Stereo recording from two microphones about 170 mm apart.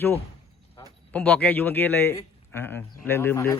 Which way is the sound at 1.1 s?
5° left (ahead or behind).